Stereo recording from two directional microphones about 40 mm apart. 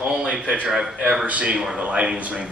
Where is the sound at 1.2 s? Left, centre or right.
Right.